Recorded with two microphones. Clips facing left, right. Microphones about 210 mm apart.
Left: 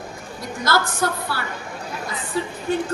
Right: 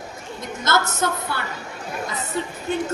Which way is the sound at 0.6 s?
25° right (ahead or behind).